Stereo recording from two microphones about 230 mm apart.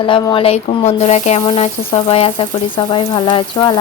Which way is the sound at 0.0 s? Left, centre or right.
Left.